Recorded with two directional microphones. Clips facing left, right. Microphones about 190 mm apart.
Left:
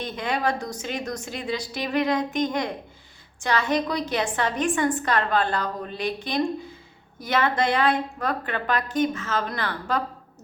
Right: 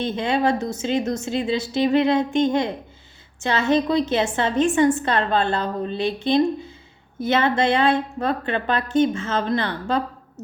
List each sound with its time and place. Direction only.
0.0 s a woman's voice: 25° right (ahead or behind)